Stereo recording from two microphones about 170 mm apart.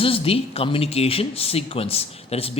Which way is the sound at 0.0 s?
35° left (ahead or behind).